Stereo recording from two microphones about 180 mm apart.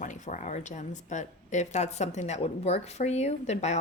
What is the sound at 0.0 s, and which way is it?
Speech, 45° left (ahead or behind).